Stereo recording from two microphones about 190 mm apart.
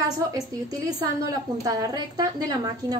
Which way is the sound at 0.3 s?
20° right (ahead or behind).